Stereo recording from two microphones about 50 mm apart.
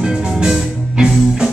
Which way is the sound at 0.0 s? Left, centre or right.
Centre.